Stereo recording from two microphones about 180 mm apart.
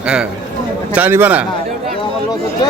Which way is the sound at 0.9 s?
10° right (ahead or behind).